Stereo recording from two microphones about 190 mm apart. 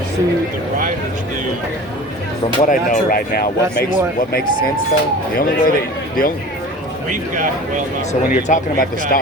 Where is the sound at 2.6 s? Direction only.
45° left (ahead or behind).